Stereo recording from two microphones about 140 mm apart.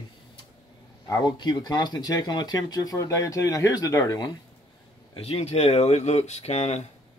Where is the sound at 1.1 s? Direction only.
30° left (ahead or behind).